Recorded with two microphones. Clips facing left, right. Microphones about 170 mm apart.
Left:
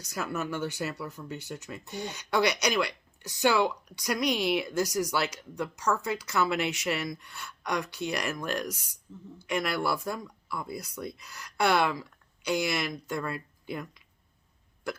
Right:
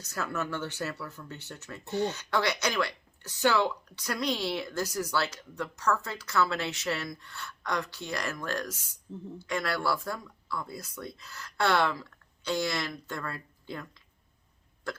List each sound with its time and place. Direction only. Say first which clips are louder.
0.0 s speech: left 1 dB; 15° left (ahead or behind)